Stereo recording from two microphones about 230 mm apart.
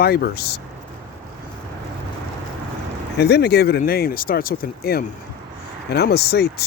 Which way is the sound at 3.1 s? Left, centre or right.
Left.